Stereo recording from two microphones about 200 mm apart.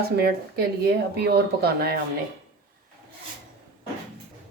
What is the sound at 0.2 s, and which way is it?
Speech, 50° right (ahead or behind).